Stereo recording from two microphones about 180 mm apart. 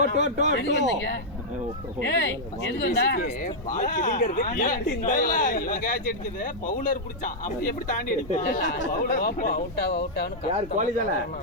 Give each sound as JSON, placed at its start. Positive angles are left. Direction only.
{"t": 0.2, "sound": "speech", "side_deg": -40}
{"t": 0.5, "sound": "speech", "side_deg": 75}
{"t": 3.8, "sound": "speech", "side_deg": 50}
{"t": 8.4, "sound": "speech", "side_deg": 65}
{"t": 10.5, "sound": "speech", "side_deg": -45}